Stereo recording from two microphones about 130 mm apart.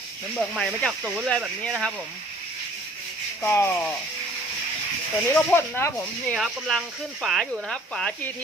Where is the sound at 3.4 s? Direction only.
20° left (ahead or behind).